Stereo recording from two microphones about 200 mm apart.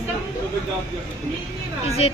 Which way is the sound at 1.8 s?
30° left (ahead or behind).